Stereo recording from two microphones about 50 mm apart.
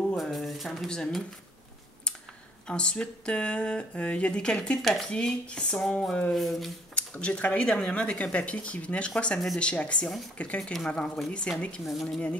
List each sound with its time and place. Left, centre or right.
0.1 s a sound: centre
0.8 s speech: centre
2.7 s speech: centre
4.8 s speech: centre
5.1 s speech: centre
6.3 s speech: centre
7.0 s speech: left
11.8 s speech: centre